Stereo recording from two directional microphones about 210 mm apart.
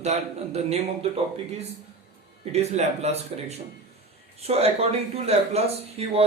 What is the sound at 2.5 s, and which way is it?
A man's voice, 30° right (ahead or behind).